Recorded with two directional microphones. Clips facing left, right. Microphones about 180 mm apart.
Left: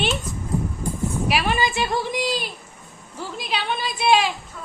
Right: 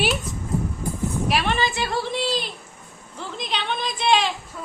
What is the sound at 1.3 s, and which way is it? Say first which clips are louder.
A woman's voice: left 1 dB; 5° left (ahead or behind).